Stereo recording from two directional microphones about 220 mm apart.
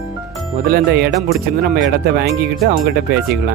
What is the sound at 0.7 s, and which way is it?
Speech, 45° right (ahead or behind).